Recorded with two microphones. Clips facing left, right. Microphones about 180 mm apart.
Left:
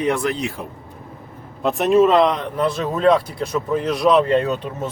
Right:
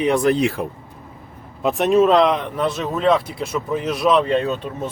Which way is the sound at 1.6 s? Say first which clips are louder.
Left 1 dB; centre (ahead or behind).